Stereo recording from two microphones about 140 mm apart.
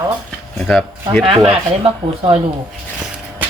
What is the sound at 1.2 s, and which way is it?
Speech, 45° right (ahead or behind).